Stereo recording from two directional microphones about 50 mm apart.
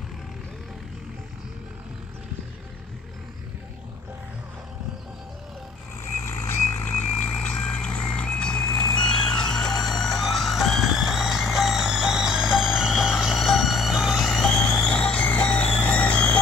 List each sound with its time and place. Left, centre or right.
6.2 s vehicle: left
7.4 s vehicle: left; by 14.9 s centre
14.9 s vehicle: centre
15.2 s vehicle: left